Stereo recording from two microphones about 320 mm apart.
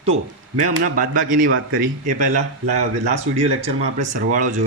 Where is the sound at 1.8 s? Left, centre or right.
Right.